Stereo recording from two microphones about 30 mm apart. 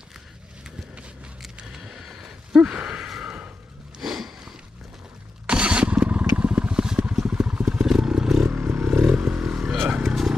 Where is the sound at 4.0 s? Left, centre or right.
Centre.